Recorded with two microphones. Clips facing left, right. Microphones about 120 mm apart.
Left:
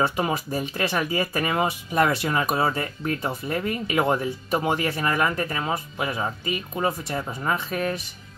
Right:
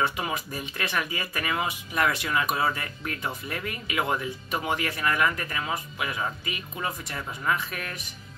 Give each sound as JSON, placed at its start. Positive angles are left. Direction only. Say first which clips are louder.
{"t": 0.0, "sound": "speech", "louder": "left 4 dB", "side_deg": 35}